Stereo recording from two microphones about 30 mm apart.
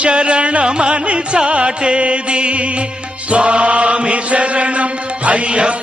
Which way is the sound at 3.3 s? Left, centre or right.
Right.